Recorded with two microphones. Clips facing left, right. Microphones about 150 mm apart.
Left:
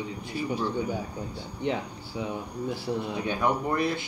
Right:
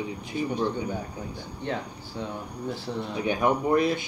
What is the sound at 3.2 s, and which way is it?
Speech, 20° right (ahead or behind).